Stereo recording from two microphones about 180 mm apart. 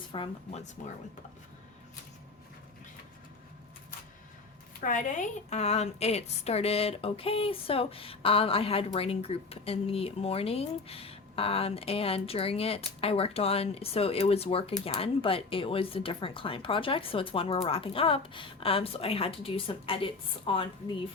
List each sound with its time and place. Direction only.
0.1 s speech: 30° left (ahead or behind)
4.8 s a woman's voice: 45° left (ahead or behind); by 20.9 s 30° left (ahead or behind)